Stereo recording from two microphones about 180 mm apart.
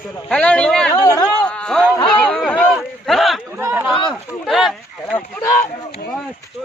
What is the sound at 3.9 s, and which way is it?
Speech, 30° left (ahead or behind).